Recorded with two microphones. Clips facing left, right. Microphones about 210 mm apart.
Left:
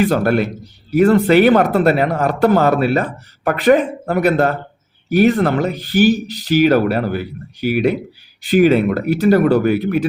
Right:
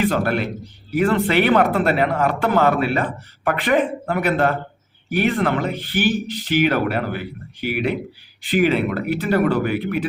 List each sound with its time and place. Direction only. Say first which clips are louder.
0.0 s a man's voice: left 5 dB; 40° left (ahead or behind)